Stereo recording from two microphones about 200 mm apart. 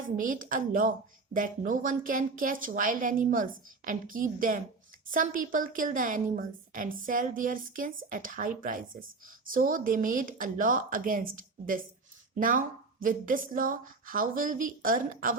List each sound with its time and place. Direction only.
0.2 s a woman's voice: 40° right (ahead or behind)